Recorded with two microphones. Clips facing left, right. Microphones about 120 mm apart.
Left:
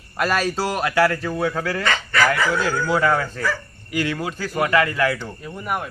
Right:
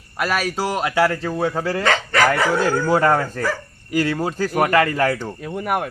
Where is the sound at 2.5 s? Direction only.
45° right (ahead or behind).